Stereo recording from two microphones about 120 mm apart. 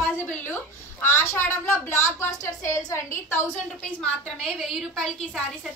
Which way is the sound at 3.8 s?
5° left (ahead or behind).